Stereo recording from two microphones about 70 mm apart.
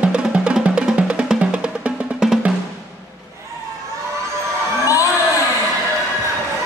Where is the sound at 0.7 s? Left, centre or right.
Centre.